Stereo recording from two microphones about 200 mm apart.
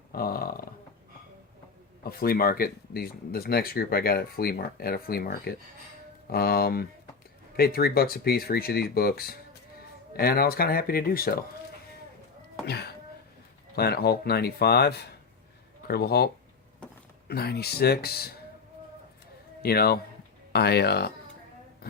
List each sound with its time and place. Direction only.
0.1 s speech: 50° left (ahead or behind)
2.0 s speech: 50° left (ahead or behind)
12.6 s a sound: 55° left (ahead or behind)
13.7 s speech: 55° left (ahead or behind)
19.6 s speech: 50° left (ahead or behind)